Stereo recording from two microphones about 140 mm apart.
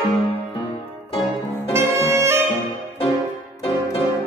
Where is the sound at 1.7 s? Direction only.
20° right (ahead or behind).